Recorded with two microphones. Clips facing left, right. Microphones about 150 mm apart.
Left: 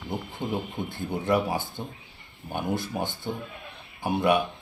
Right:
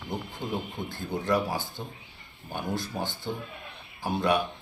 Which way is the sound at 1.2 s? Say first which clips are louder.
Left 2 dB; 20° left (ahead or behind).